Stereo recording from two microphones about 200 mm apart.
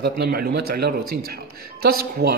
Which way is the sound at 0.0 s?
55° right (ahead or behind).